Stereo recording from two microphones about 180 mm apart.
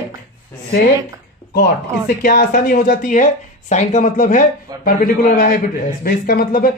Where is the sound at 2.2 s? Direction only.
50° left (ahead or behind).